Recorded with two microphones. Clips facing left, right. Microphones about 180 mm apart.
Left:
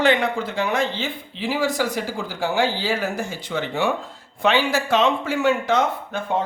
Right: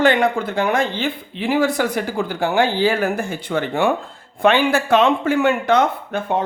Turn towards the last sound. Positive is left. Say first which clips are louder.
# right 3 dB
turn(degrees=-60)  # may be behind; listen again after turning